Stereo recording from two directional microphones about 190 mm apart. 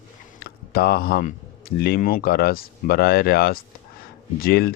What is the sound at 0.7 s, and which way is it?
Speech, 55° left (ahead or behind).